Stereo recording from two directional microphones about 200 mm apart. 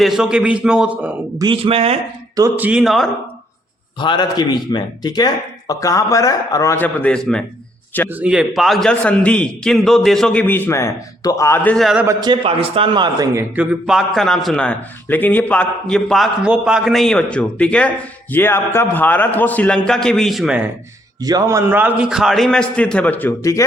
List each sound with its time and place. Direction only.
0.0 s a man's voice: centre (ahead or behind)
1.4 s a man's voice: 25° right (ahead or behind)
2.3 s a man's voice: 10° right (ahead or behind)
4.0 s speech: 20° left (ahead or behind); by 7.4 s 5° left (ahead or behind)
8.1 s a man's voice: 5° right (ahead or behind)
12.0 s a man's voice: 20° right (ahead or behind)
13.6 s a man's voice: 5° right (ahead or behind)
21.2 s a man's voice: 20° right (ahead or behind); by 23.6 s 15° left (ahead or behind)